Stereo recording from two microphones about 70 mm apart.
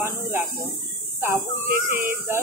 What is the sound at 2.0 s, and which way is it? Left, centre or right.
Speech, right.